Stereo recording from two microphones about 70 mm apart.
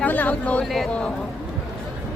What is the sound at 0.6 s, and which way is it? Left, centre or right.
Speech, centre.